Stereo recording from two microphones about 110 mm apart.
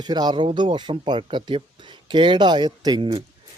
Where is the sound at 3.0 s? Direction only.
55° right (ahead or behind).